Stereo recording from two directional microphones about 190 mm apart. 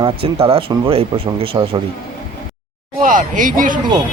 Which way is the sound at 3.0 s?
45° right (ahead or behind).